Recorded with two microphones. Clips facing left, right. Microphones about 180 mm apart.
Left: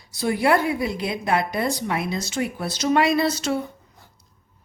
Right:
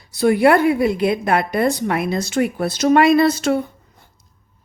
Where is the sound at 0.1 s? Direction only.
60° right (ahead or behind).